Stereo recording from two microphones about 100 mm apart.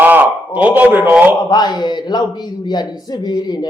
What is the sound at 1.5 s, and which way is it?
A man's voice, 45° left (ahead or behind).